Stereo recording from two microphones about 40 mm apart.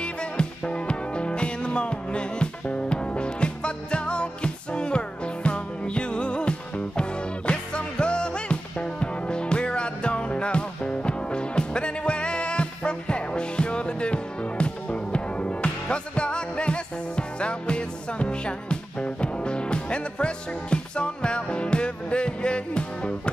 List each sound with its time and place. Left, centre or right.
0.0 s music: left